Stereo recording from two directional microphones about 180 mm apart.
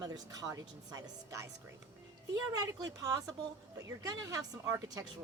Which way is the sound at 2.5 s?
20° right (ahead or behind).